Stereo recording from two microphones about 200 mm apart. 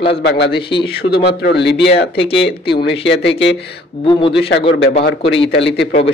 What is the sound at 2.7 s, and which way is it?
Speech, 60° left (ahead or behind).